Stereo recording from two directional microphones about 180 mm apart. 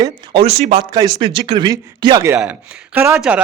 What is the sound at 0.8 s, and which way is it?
A man's voice, 25° right (ahead or behind).